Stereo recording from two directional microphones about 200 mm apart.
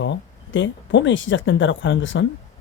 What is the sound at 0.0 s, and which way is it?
Speech, 65° left (ahead or behind).